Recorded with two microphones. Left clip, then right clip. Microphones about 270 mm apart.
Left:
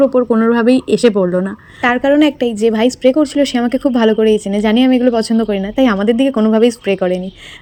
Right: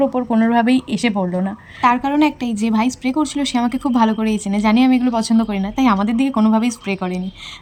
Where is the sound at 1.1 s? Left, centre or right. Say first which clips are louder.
Left 7 dB; right.